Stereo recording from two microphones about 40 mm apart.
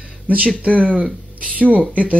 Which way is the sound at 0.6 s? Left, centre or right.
Right.